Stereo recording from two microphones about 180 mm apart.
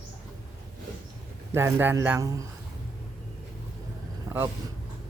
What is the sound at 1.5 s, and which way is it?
Speech, 10° right (ahead or behind).